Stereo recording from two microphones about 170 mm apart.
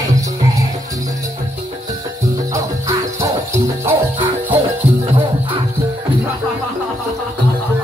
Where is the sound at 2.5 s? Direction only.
20° right (ahead or behind).